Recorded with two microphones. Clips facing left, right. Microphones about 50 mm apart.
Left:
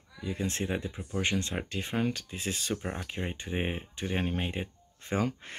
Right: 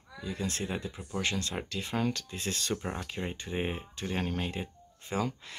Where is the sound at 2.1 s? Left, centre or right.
Centre.